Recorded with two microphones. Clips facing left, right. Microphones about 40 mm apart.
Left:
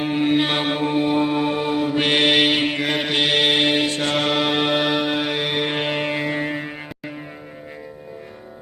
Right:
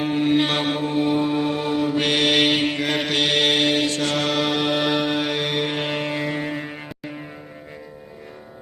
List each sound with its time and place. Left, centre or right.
0.0 s mantra: centre
0.8 s music: left
1.0 s mantra: left
2.4 s mantra: centre
4.9 s music: centre